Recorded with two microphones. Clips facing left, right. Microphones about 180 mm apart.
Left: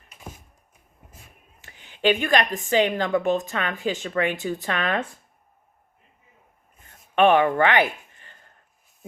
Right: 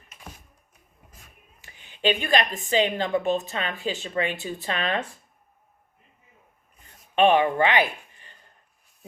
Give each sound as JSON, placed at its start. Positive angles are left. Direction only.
{"t": 1.6, "sound": "a woman's voice", "side_deg": -20}
{"t": 7.2, "sound": "speech", "side_deg": -20}
{"t": 8.1, "sound": "a sound", "side_deg": -20}